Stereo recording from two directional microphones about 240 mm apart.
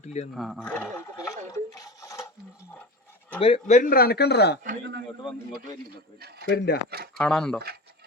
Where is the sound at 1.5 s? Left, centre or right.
Centre.